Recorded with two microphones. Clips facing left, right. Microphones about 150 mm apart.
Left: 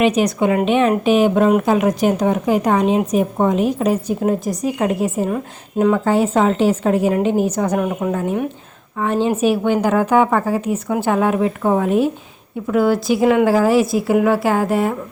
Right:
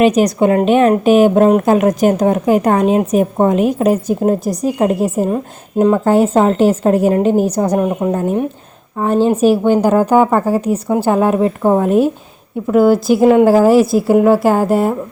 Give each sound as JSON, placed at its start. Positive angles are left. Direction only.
{"t": 0.0, "sound": "a woman's voice", "side_deg": -40}
{"t": 4.2, "sound": "a woman's voice", "side_deg": -40}
{"t": 8.1, "sound": "a woman's voice", "side_deg": -40}